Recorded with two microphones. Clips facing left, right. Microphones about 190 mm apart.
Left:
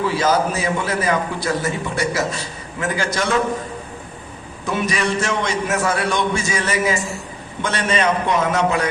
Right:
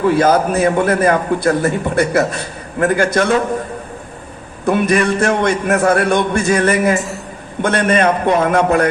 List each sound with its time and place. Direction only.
0.0 s a man's voice: 55° right (ahead or behind)
4.6 s a man's voice: 55° right (ahead or behind)